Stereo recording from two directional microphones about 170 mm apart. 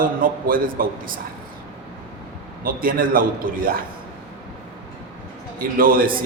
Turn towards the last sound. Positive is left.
turn(degrees=-55)  # may be behind; listen again after turning